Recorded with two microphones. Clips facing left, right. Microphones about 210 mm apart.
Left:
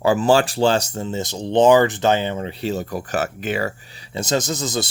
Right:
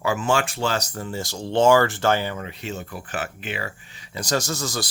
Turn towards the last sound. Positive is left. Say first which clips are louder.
# left 4 dB
turn(degrees=20)  # may be behind; listen again after turning